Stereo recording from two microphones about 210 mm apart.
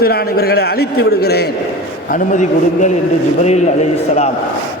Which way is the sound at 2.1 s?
35° left (ahead or behind).